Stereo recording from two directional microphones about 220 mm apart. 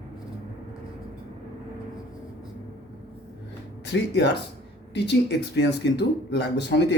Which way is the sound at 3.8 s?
50° left (ahead or behind).